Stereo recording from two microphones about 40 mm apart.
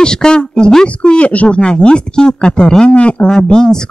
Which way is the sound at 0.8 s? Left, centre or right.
Left.